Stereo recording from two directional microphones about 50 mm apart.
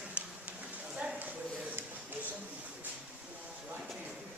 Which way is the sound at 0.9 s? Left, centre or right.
Centre.